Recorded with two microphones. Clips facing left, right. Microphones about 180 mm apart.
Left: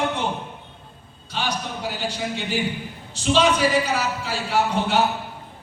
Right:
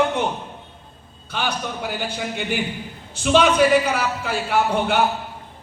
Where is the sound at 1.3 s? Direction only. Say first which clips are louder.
Right 2 dB; 55° right (ahead or behind).